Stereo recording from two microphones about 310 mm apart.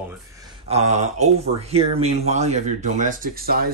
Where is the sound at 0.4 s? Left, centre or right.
Centre.